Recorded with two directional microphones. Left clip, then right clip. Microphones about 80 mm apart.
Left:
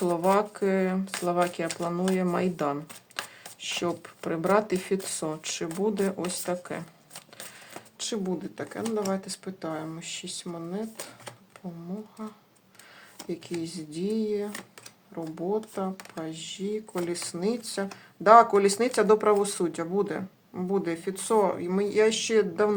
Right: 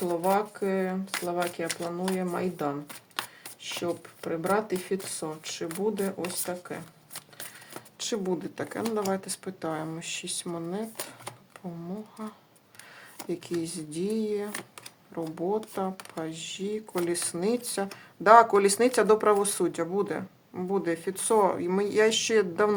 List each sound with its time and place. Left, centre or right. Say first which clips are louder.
0.0 s speech: left 2 dB; left
8.1 s speech: right 2 dB; right
13.2 s speech: right 2 dB; right